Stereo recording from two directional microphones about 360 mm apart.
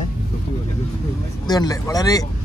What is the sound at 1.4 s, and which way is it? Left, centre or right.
Speech, centre.